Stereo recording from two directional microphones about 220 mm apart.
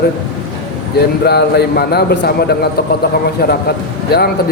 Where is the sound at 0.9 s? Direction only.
45° left (ahead or behind).